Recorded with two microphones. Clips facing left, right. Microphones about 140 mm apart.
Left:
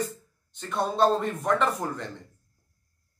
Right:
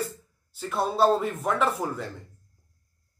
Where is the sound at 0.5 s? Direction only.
5° right (ahead or behind).